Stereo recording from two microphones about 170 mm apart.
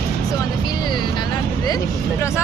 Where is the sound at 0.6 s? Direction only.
25° left (ahead or behind).